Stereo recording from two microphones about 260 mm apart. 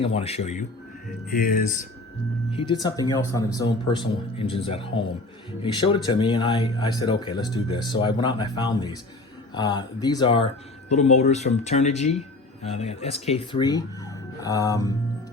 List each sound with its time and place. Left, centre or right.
0.0 s speech: left
2.5 s speech: centre